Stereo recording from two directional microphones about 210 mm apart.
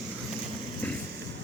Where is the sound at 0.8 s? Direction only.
5° left (ahead or behind).